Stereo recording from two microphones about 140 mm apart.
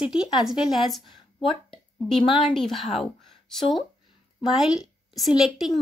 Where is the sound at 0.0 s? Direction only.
5° right (ahead or behind).